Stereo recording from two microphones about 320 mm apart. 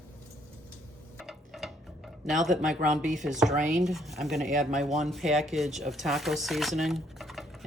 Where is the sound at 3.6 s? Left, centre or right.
Right.